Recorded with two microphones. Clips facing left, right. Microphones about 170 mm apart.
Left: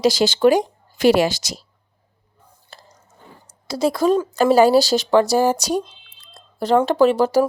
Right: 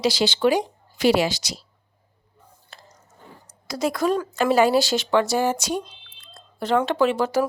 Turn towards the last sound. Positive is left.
turn(degrees=35)  # may be behind; listen again after turning